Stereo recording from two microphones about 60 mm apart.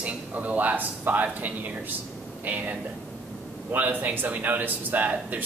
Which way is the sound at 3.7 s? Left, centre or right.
Right.